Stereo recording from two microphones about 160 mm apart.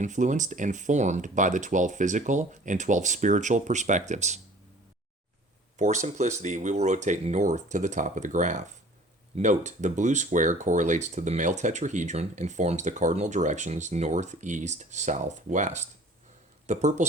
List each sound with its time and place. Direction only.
0.0 s speech: 50° right (ahead or behind)
5.7 s speech: 50° right (ahead or behind)